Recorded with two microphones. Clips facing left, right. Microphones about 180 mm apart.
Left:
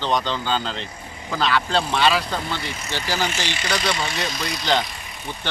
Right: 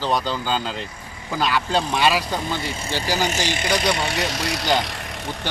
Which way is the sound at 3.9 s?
65° right (ahead or behind).